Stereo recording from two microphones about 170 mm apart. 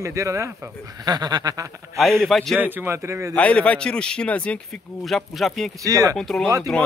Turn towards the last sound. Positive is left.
turn(degrees=5)  # may be behind; listen again after turning